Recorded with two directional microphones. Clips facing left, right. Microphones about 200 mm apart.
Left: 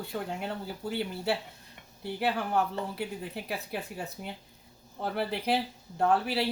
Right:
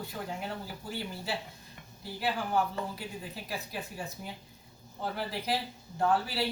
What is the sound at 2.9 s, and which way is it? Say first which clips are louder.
Speech: left 5 dB; 65° left (ahead or behind).